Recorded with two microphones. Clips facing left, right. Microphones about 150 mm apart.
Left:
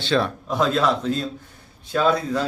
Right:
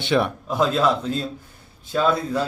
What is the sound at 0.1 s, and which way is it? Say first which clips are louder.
Speech: right 1 dB; 10° right (ahead or behind).